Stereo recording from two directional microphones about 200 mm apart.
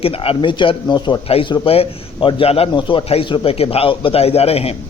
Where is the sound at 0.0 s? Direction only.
30° left (ahead or behind).